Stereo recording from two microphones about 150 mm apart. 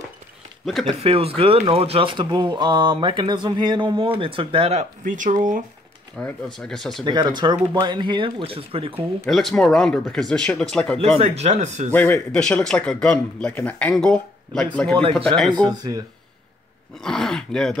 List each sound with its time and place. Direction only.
0.7 s speech: centre (ahead or behind)
0.9 s speech: 40° right (ahead or behind)
5.0 s speech: 60° right (ahead or behind)
6.1 s speech: 5° left (ahead or behind)
7.1 s speech: 30° right (ahead or behind)
9.3 s speech: centre (ahead or behind)
11.2 s speech: 50° right (ahead or behind)
11.9 s a man's voice: 10° left (ahead or behind)
15.5 s speech: 25° right (ahead or behind)
17.0 s speech: 5° left (ahead or behind)